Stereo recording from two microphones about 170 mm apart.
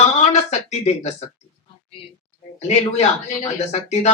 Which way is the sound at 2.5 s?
40° left (ahead or behind).